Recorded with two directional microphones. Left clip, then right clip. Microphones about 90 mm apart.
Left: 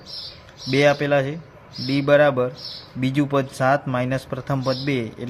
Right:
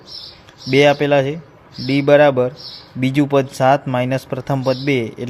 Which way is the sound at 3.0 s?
70° right (ahead or behind).